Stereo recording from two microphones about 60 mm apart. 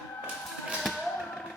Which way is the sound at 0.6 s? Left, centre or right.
Centre.